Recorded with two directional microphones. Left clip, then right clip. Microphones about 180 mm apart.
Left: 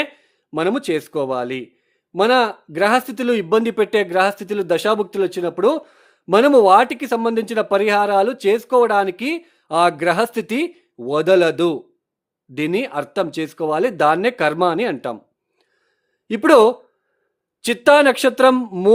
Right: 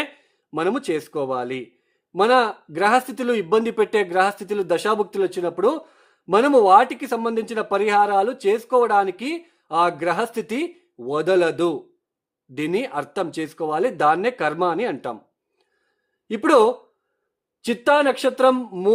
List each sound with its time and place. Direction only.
0.0 s speech: 25° left (ahead or behind)
16.2 s speech: 30° left (ahead or behind)